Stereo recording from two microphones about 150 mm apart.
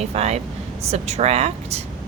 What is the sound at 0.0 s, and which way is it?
Speech, 45° right (ahead or behind).